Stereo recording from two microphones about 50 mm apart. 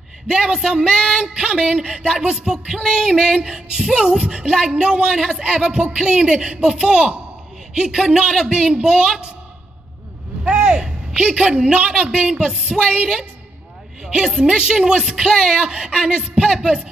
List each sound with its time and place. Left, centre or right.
0.3 s speech: centre
10.4 s a woman's voice: centre
15.3 s speech: centre
15.7 s speech: centre